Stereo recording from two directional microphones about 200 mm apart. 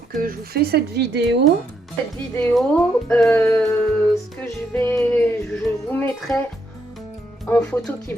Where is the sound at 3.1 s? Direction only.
10° left (ahead or behind).